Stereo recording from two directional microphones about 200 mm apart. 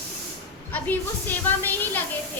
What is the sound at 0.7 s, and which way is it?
Speech, 10° left (ahead or behind).